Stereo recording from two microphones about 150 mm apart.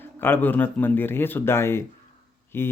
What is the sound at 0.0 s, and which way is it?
Speech, 15° left (ahead or behind).